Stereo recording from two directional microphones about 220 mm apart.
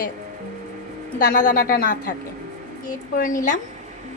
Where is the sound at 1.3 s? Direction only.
40° left (ahead or behind).